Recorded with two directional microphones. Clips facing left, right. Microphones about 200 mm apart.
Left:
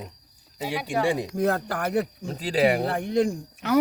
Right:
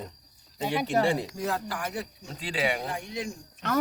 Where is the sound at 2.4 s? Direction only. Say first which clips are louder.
Left 8 dB; 40° left (ahead or behind).